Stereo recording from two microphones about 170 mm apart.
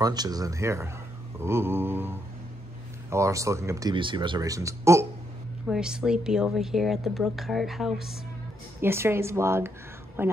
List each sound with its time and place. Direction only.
0.0 s speech: 25° right (ahead or behind)
3.9 s speech: 30° right (ahead or behind)
5.7 s a woman's voice: 5° right (ahead or behind)
8.8 s speech: 15° right (ahead or behind)